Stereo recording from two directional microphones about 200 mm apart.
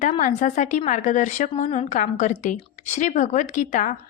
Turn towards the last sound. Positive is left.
turn(degrees=40)  # may be behind; listen again after turning